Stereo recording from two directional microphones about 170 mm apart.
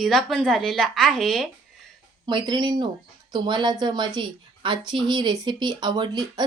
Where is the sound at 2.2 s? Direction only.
25° right (ahead or behind).